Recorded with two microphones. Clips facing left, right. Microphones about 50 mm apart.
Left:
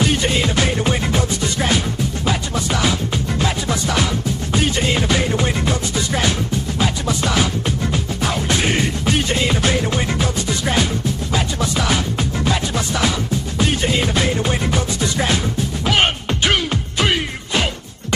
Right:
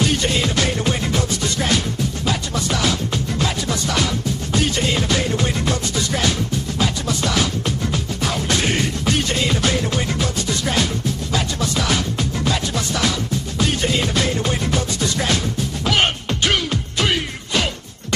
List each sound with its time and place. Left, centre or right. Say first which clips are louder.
0.0 s music: left 1 dB; centre